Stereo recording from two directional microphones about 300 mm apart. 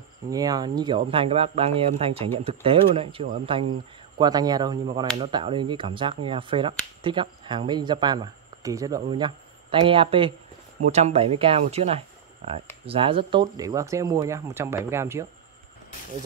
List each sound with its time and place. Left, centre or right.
0.3 s speech: centre